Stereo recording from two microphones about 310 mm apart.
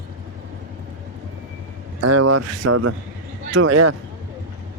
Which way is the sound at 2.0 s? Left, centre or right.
Right.